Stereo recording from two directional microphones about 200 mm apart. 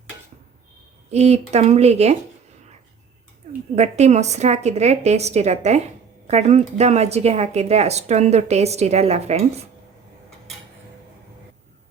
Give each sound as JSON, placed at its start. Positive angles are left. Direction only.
{"t": 1.1, "sound": "speech", "side_deg": -35}
{"t": 3.8, "sound": "speech", "side_deg": -35}